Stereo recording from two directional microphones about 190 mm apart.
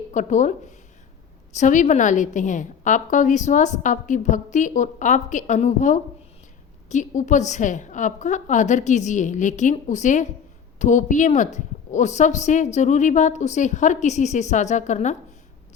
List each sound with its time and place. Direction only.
0.1 s speech: 40° left (ahead or behind)
1.5 s a woman's voice: 40° left (ahead or behind)